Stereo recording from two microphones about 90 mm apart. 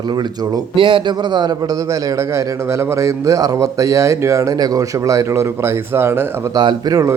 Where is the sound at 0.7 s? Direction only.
70° right (ahead or behind).